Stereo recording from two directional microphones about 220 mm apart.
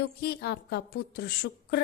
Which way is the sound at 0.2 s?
45° left (ahead or behind).